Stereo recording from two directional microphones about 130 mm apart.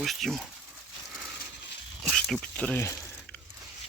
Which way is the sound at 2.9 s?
25° left (ahead or behind).